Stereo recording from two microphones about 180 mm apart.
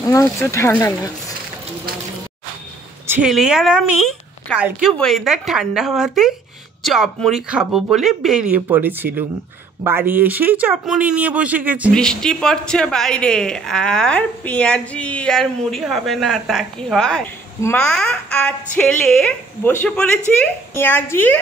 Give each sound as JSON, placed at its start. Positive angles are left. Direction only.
{"t": 0.0, "sound": "speech", "side_deg": 15}
{"t": 3.1, "sound": "speech", "side_deg": -5}
{"t": 11.9, "sound": "speech", "side_deg": 5}
{"t": 17.6, "sound": "speech", "side_deg": 15}